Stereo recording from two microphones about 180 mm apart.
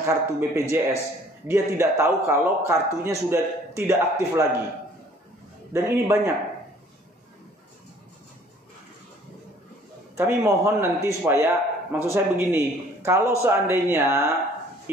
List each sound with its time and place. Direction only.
0.0 s speech: 15° right (ahead or behind)
5.7 s speech: 15° right (ahead or behind)
10.1 s speech: 15° right (ahead or behind)